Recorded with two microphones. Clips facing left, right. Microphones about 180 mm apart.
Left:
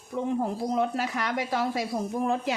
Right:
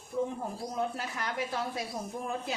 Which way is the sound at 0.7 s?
85° left.